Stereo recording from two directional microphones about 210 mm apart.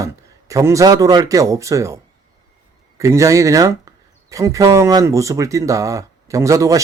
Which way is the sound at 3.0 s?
15° right (ahead or behind).